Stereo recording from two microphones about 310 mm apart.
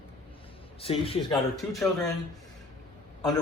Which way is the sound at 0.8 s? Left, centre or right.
Centre.